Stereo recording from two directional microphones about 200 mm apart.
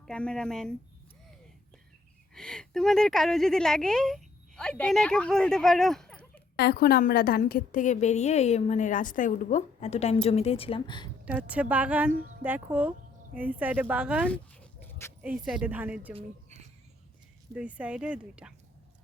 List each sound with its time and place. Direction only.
0.0 s speech: 5° left (ahead or behind)
2.3 s a woman's voice: 5° left (ahead or behind)
6.6 s a woman's voice: 50° left (ahead or behind); by 11.1 s 20° left (ahead or behind)
11.3 s a woman's voice: 5° right (ahead or behind)
14.3 s dog: 5° left (ahead or behind)
15.2 s a woman's voice: 5° right (ahead or behind)
17.5 s speech: 5° right (ahead or behind)